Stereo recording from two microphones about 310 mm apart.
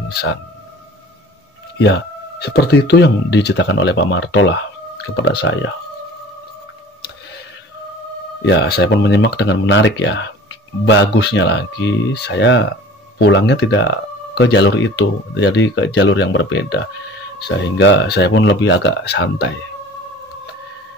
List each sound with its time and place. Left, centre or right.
0.1 s speech: left
1.8 s speech: left
8.5 s speech: left